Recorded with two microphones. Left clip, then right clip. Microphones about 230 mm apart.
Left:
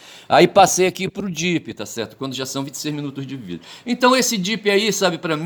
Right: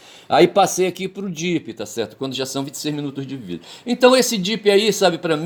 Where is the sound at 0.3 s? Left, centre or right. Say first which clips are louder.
Left 2 dB; left.